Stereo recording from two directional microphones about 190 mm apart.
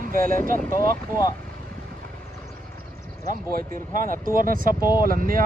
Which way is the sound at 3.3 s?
45° right (ahead or behind).